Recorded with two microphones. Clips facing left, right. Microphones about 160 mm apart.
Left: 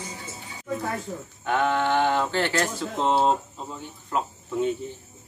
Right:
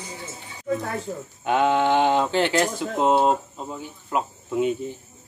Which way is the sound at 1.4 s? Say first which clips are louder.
Right 4 dB; 15° right (ahead or behind).